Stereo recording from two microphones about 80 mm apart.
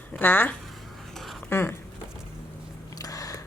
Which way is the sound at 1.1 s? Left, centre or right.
Centre.